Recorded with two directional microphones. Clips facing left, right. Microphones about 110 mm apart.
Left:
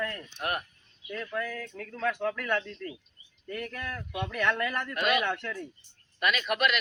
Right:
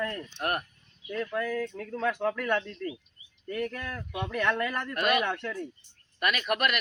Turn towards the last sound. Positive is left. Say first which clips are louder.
# even
turn(degrees=-50)  # may be behind; listen again after turning